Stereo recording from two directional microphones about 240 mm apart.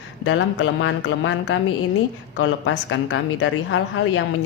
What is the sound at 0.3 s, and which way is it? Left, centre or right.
Speech, left.